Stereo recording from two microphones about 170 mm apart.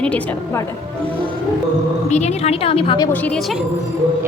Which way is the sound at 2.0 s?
40° left (ahead or behind).